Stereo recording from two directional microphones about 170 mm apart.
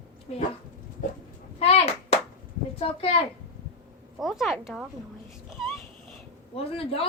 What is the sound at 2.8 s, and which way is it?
Speech, 35° left (ahead or behind).